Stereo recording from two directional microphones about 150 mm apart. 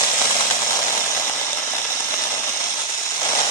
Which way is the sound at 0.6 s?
20° left (ahead or behind).